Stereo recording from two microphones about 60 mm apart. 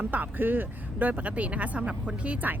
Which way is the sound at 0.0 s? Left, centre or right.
Right.